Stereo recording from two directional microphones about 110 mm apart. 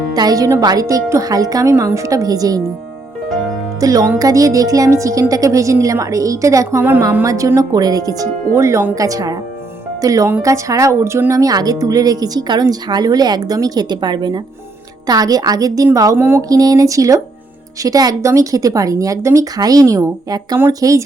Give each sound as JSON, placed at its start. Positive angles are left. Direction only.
{"t": 0.1, "sound": "speech", "side_deg": -35}
{"t": 3.8, "sound": "speech", "side_deg": -30}
{"t": 16.1, "sound": "speech", "side_deg": -20}
{"t": 16.5, "sound": "speech", "side_deg": -35}